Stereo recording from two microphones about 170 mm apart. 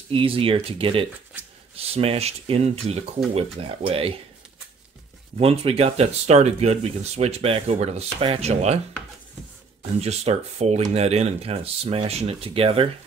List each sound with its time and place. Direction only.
0.1 s speech: 35° right (ahead or behind)
5.4 s speech: 35° right (ahead or behind)
9.9 s speech: 40° right (ahead or behind)